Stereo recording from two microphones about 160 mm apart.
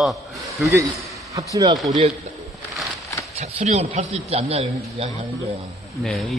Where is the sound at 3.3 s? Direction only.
45° right (ahead or behind).